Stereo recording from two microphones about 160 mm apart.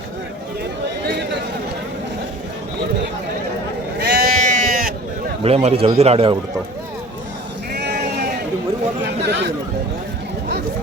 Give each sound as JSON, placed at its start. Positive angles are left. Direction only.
{"t": 4.0, "sound": "sheep", "side_deg": -80}
{"t": 5.4, "sound": "a man's voice", "side_deg": -40}
{"t": 7.7, "sound": "sheep", "side_deg": -90}
{"t": 9.2, "sound": "speech", "side_deg": -90}